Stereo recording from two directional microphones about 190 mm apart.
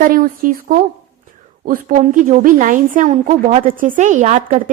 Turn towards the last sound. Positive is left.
turn(degrees=-40)  # may be behind; listen again after turning